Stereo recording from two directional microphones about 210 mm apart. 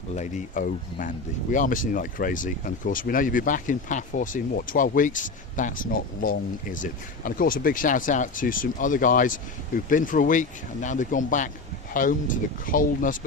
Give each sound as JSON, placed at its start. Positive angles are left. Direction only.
{"t": 0.1, "sound": "speech", "side_deg": 35}